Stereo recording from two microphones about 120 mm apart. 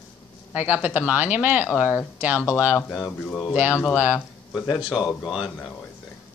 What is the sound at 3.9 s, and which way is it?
Speech, 10° right (ahead or behind).